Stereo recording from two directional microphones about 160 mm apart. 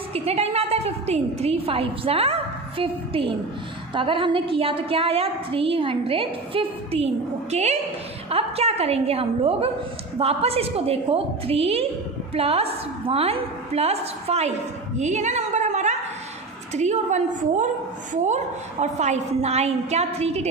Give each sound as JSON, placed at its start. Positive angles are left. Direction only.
{"t": 0.1, "sound": "a woman's voice", "side_deg": -40}